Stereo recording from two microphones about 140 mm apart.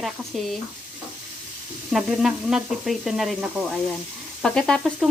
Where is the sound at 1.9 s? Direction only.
Centre (ahead or behind).